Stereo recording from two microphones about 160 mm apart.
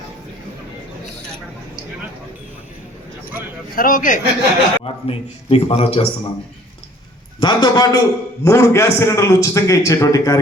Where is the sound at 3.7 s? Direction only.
60° left (ahead or behind).